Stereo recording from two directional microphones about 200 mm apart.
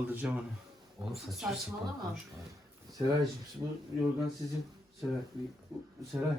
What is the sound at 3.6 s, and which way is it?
Speech, 15° right (ahead or behind).